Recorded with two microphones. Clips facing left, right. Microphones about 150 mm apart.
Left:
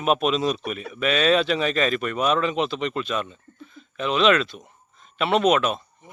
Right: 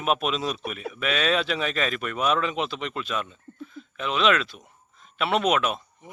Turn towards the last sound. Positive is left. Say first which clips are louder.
# left 2 dB
turn(degrees=-5)  # may be behind; listen again after turning